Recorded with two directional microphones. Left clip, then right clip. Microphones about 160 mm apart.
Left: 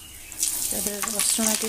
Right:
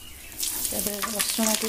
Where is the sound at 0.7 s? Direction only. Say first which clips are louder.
Even; 5° left (ahead or behind).